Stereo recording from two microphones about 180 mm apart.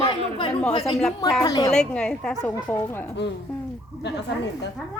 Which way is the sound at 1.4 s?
20° left (ahead or behind).